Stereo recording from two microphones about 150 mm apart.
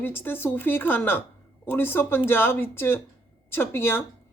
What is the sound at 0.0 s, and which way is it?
Speech, 15° left (ahead or behind).